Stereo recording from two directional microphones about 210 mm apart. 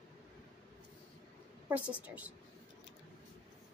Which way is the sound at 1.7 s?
5° right (ahead or behind).